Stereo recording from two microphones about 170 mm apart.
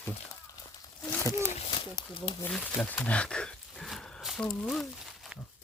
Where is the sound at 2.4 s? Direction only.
5° left (ahead or behind).